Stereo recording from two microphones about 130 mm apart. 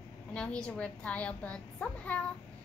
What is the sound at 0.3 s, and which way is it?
A woman's voice, 10° left (ahead or behind).